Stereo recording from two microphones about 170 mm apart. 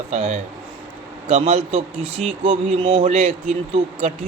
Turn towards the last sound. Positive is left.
turn(degrees=-40)  # may be behind; listen again after turning